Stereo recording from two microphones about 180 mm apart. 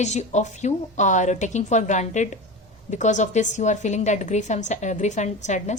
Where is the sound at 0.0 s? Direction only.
40° left (ahead or behind).